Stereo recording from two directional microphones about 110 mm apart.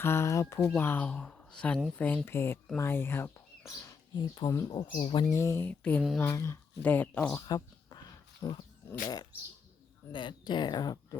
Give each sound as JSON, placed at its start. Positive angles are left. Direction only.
{"t": 0.0, "sound": "speech", "side_deg": 25}
{"t": 4.9, "sound": "speech", "side_deg": 50}
{"t": 5.3, "sound": "speech", "side_deg": 30}
{"t": 5.6, "sound": "speech", "side_deg": 15}
{"t": 6.2, "sound": "speech", "side_deg": 30}
{"t": 6.8, "sound": "speech", "side_deg": 15}
{"t": 7.4, "sound": "a sound", "side_deg": 35}
{"t": 8.9, "sound": "speech", "side_deg": 35}
{"t": 10.1, "sound": "speech", "side_deg": 45}